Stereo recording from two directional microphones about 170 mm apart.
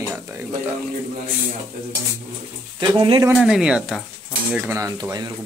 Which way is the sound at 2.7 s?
25° right (ahead or behind).